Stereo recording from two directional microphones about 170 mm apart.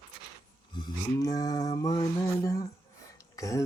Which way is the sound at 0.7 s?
25° left (ahead or behind).